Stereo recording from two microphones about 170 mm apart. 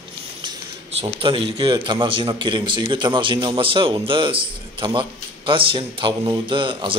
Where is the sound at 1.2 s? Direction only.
30° right (ahead or behind).